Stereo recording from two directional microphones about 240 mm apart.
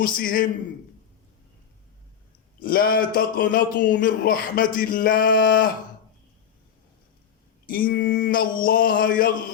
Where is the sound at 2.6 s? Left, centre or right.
Left.